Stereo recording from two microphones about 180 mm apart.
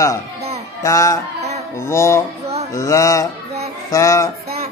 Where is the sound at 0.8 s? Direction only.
20° left (ahead or behind).